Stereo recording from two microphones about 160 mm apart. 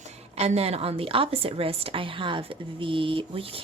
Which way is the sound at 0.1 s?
40° right (ahead or behind).